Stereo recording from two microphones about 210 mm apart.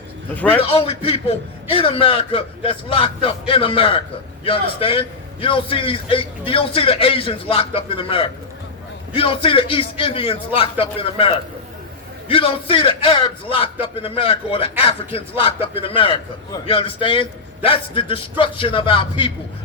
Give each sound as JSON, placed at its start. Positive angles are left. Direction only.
{"t": 0.6, "sound": "a man's voice", "side_deg": 30}